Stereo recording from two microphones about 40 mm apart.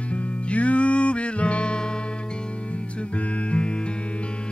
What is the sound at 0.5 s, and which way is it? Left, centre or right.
Music, left.